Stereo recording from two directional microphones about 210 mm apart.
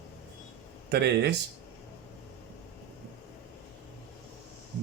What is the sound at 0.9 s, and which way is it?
Speech, 50° right (ahead or behind).